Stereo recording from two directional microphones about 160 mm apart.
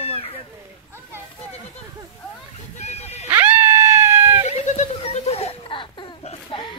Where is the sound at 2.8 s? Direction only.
40° left (ahead or behind).